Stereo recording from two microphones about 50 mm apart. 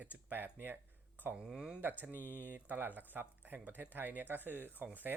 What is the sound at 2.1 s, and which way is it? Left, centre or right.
Speech, left.